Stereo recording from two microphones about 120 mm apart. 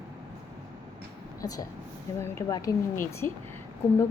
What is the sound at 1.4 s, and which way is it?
A woman's voice, 30° left (ahead or behind).